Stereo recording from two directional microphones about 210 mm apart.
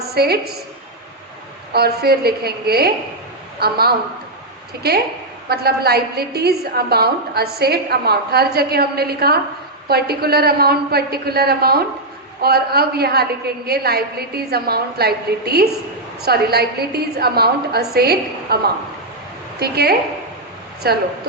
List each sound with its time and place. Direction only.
0.1 s a woman's voice: 50° right (ahead or behind)
1.7 s a woman's voice: 50° right (ahead or behind)
5.5 s a woman's voice: 50° right (ahead or behind)